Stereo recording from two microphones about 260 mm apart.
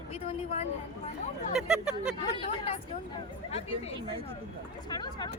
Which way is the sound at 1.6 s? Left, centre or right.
Centre.